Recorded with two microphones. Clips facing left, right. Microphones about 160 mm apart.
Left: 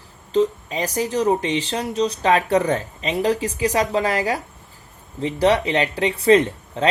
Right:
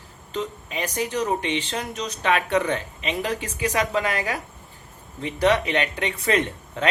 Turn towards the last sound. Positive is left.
turn(degrees=30)  # may be behind; listen again after turning